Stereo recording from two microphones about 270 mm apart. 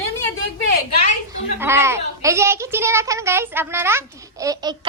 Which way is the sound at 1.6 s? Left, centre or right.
Centre.